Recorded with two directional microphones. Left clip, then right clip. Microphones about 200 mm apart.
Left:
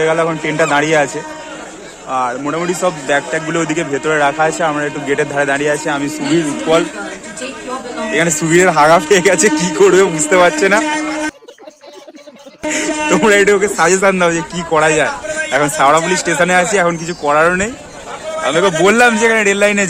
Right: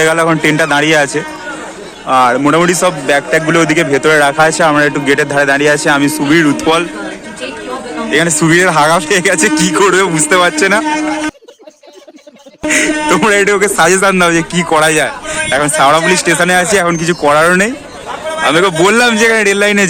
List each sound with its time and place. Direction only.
0.0 s a man's voice: 10° right (ahead or behind)
2.5 s speech: 20° right (ahead or behind)
2.8 s a man's voice: 5° right (ahead or behind)
8.1 s a man's voice: centre (ahead or behind)
12.6 s a man's voice: 5° right (ahead or behind)
18.4 s a man's voice: 5° right (ahead or behind)